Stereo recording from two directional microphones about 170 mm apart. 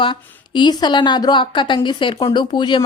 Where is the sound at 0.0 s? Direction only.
30° left (ahead or behind).